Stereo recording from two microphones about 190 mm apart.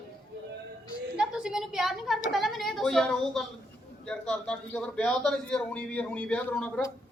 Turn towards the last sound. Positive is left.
turn(degrees=5)  # may be behind; listen again after turning